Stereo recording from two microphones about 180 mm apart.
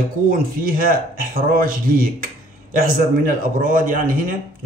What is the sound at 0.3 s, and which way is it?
A man's voice, 50° right (ahead or behind).